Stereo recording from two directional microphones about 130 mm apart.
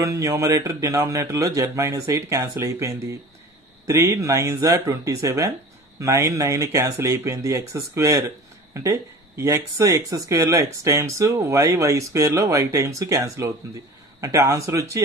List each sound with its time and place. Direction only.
0.0 s speech: 25° right (ahead or behind)